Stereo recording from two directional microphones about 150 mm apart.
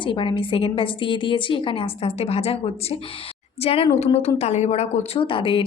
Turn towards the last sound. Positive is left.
turn(degrees=35)  # may be behind; listen again after turning